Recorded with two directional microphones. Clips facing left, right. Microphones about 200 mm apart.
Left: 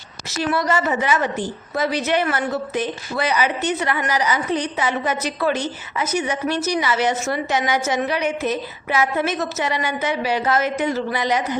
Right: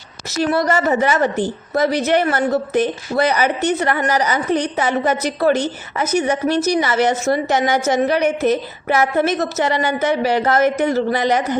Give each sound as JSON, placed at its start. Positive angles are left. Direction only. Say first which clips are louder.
{"t": 0.3, "sound": "a woman's voice", "louder": "right 4 dB", "side_deg": -40}